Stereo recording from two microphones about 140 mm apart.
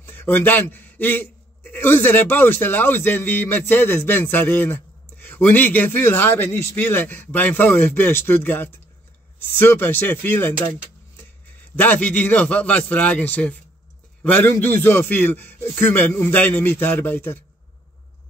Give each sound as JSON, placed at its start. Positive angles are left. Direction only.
{"t": 0.0, "sound": "a man's voice", "side_deg": 15}
{"t": 11.7, "sound": "a man's voice", "side_deg": 10}